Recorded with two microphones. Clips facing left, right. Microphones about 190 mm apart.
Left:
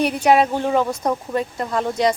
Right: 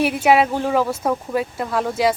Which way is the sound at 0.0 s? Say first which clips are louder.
Even; 5° right (ahead or behind).